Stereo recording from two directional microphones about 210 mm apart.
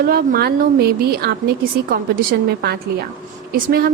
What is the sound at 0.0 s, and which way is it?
A woman's voice, 45° right (ahead or behind).